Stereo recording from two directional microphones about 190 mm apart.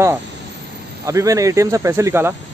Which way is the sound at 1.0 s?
15° right (ahead or behind).